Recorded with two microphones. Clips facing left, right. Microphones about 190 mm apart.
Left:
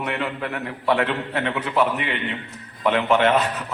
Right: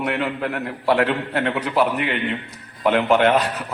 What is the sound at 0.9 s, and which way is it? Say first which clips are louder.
Speech: right 3 dB; 40° right (ahead or behind).